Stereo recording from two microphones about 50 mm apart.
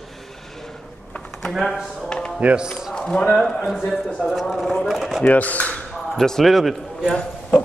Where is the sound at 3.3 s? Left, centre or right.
Centre.